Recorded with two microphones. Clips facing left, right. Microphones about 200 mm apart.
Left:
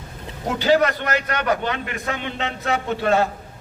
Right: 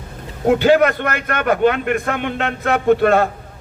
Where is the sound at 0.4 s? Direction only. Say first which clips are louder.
Right 6 dB; 55° right (ahead or behind).